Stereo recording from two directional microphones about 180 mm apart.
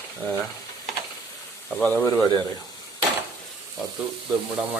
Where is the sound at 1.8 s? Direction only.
10° left (ahead or behind).